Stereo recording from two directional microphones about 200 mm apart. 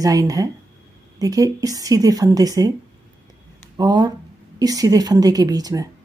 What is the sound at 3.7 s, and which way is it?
Speech, 20° right (ahead or behind).